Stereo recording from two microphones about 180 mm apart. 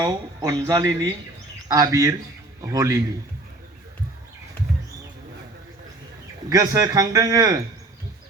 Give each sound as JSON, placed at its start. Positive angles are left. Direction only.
{"t": 0.0, "sound": "a man's voice", "side_deg": -20}
{"t": 6.5, "sound": "speech", "side_deg": -20}